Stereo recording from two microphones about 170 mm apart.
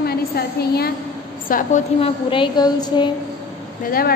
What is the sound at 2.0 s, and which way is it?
A woman's voice, 30° left (ahead or behind).